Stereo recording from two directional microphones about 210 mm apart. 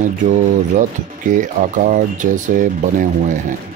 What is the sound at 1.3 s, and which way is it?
Speech, 35° right (ahead or behind).